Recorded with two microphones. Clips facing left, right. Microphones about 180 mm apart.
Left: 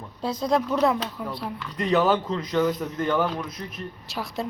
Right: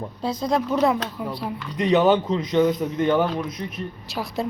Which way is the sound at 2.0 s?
25° right (ahead or behind).